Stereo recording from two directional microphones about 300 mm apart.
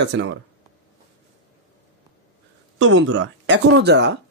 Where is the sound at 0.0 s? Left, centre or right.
Right.